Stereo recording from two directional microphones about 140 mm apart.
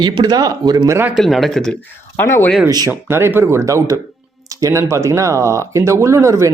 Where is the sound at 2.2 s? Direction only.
20° left (ahead or behind).